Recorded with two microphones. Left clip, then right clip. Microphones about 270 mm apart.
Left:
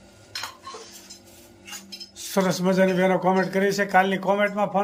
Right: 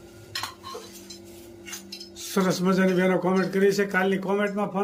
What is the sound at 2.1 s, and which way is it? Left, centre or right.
Speech, centre.